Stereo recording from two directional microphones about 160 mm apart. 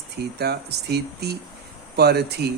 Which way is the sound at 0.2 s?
90° right.